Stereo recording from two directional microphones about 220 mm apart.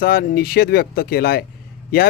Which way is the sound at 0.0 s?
45° left (ahead or behind).